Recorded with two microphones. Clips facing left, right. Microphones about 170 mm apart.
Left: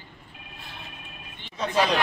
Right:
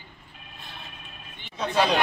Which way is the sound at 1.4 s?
Centre (ahead or behind).